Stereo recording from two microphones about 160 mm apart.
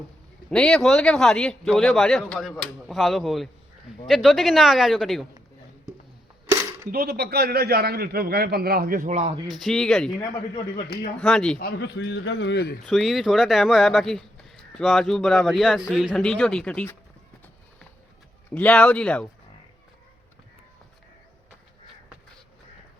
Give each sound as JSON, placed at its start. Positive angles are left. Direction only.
{"t": 0.5, "sound": "speech", "side_deg": 5}
{"t": 6.9, "sound": "a man's voice", "side_deg": -70}
{"t": 9.1, "sound": "speech", "side_deg": -40}
{"t": 9.6, "sound": "speech", "side_deg": 0}
{"t": 11.2, "sound": "speech", "side_deg": 5}
{"t": 11.6, "sound": "a man's voice", "side_deg": 90}
{"t": 12.8, "sound": "speech", "side_deg": 0}
{"t": 18.5, "sound": "speech", "side_deg": 10}